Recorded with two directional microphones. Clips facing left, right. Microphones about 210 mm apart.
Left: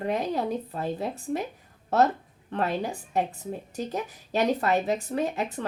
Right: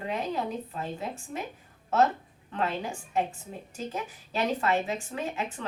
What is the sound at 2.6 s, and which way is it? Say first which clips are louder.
A woman's voice: left 3 dB; 35° left (ahead or behind).